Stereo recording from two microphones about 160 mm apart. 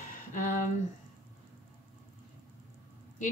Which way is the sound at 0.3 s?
55° left (ahead or behind).